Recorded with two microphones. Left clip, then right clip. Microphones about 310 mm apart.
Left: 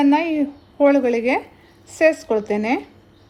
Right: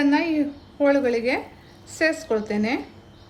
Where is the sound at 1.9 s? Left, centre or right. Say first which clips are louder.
Left 6 dB; centre.